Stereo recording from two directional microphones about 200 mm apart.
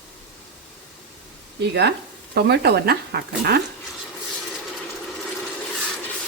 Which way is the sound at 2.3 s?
55° right (ahead or behind).